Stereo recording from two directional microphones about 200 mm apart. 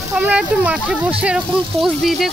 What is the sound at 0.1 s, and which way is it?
Speech, 5° right (ahead or behind).